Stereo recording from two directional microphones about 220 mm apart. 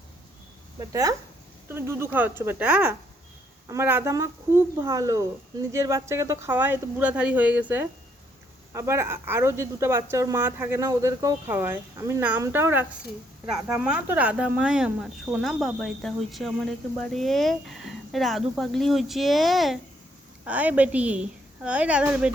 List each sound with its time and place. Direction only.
0.8 s speech: 15° right (ahead or behind)